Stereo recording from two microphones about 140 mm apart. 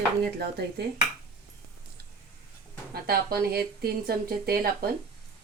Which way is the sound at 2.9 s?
90° right.